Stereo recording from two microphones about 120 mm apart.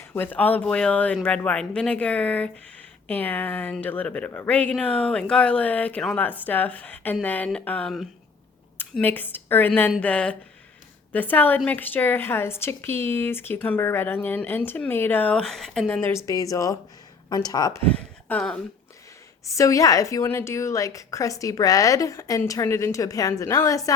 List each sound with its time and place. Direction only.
0.0 s a woman's voice: 15° left (ahead or behind)
16.0 s a woman's voice: 20° left (ahead or behind)
18.3 s speech: 10° left (ahead or behind)
19.5 s a woman's voice: 25° left (ahead or behind)